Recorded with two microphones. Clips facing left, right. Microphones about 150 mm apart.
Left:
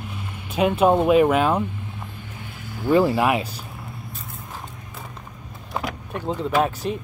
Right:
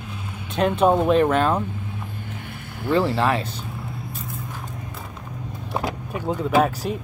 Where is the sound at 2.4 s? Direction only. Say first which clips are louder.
Right 1 dB; 60° right (ahead or behind).